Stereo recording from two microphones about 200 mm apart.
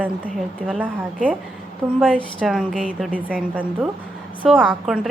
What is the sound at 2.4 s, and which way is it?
Speech, 5° right (ahead or behind).